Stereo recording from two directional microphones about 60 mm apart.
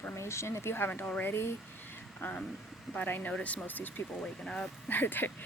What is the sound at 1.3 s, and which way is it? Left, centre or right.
Speech, left.